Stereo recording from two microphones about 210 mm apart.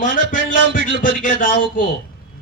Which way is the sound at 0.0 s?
40° left (ahead or behind).